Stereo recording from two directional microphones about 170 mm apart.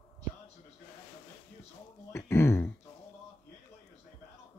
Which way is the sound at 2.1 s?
15° left (ahead or behind).